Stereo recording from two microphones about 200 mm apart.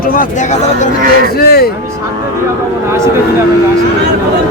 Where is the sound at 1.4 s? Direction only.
50° left (ahead or behind).